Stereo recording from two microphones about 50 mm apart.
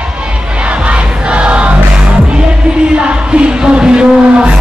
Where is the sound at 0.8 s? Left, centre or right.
Right.